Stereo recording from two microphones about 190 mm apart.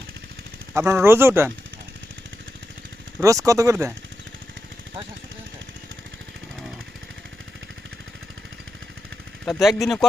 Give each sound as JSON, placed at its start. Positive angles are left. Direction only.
{"t": 0.8, "sound": "speech", "side_deg": -15}
{"t": 3.2, "sound": "speech", "side_deg": -15}
{"t": 9.5, "sound": "speech", "side_deg": 0}